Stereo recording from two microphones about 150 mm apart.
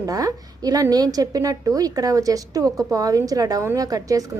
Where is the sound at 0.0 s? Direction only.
25° right (ahead or behind).